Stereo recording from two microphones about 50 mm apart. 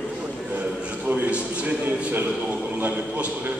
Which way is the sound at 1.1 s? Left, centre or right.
Right.